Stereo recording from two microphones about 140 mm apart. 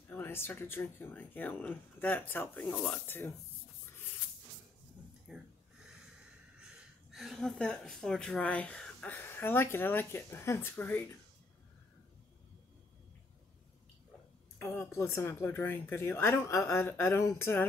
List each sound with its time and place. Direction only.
0.1 s speech: 15° left (ahead or behind)
5.3 s a sound: 5° right (ahead or behind)
6.6 s a woman's voice: 5° right (ahead or behind); by 11.1 s 15° left (ahead or behind)
14.6 s speech: 15° left (ahead or behind)